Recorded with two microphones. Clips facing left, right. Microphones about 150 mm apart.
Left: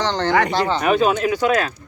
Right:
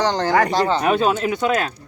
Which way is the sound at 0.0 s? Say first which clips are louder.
Right 1 dB; 10° right (ahead or behind).